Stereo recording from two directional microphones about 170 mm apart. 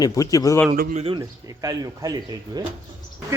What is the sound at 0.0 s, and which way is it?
Speech, 20° left (ahead or behind).